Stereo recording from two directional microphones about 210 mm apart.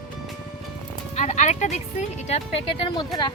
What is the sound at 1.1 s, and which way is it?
Speech, 35° left (ahead or behind).